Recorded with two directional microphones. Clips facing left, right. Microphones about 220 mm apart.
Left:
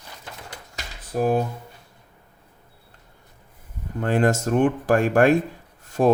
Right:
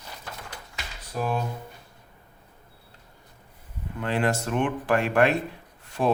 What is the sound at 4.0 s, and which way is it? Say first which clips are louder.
Speech: left 5 dB; 45° left (ahead or behind).